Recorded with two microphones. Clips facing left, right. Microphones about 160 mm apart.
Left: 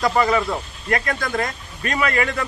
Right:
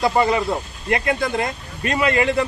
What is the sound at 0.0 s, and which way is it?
Speech, 25° right (ahead or behind).